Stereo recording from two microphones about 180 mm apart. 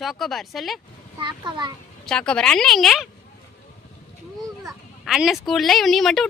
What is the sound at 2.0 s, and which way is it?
Speech, 5° left (ahead or behind).